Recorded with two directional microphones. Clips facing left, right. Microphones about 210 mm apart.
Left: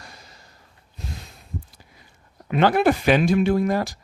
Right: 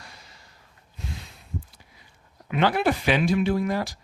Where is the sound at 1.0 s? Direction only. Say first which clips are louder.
Left 1 dB; 40° left (ahead or behind).